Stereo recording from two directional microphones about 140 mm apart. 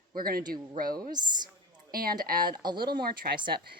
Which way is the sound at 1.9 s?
90° right.